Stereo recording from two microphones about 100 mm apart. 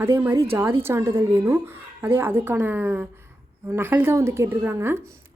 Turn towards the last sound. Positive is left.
turn(degrees=-20)  # may be behind; listen again after turning